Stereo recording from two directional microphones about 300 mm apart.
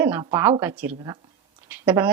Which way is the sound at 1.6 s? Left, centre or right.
Centre.